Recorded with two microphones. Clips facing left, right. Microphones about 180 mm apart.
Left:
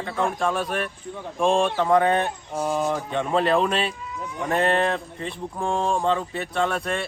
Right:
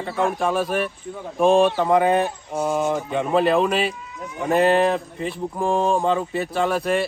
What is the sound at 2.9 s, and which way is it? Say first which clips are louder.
Speech: right 3 dB; 5° right (ahead or behind).